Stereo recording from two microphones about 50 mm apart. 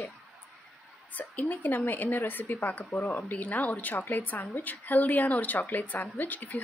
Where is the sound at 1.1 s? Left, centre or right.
Left.